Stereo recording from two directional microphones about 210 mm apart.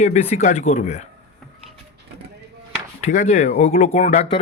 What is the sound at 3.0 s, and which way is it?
Speech, 35° left (ahead or behind).